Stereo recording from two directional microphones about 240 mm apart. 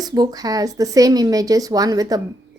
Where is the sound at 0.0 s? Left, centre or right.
Centre.